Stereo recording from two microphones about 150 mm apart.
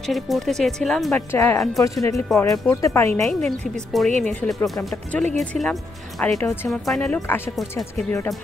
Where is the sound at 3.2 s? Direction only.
5° left (ahead or behind).